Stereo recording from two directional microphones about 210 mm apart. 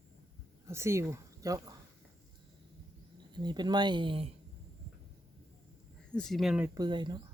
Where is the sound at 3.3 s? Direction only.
20° right (ahead or behind).